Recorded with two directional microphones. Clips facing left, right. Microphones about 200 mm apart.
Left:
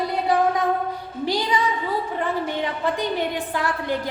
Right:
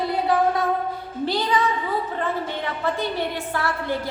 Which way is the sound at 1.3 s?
15° left (ahead or behind).